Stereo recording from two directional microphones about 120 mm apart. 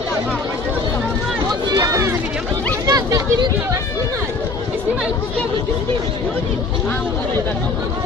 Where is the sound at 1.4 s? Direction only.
35° right (ahead or behind).